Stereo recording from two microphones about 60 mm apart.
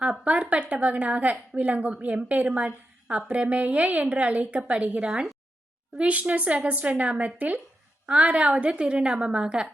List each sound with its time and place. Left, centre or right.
0.0 s a woman's voice: centre